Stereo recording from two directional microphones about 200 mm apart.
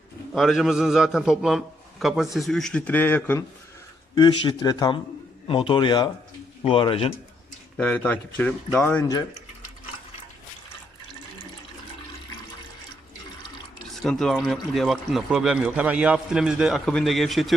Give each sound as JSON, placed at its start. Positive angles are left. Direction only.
{"t": 0.3, "sound": "speech", "side_deg": 0}
{"t": 4.1, "sound": "speech", "side_deg": 20}
{"t": 7.8, "sound": "speech", "side_deg": 5}
{"t": 13.9, "sound": "speech", "side_deg": 0}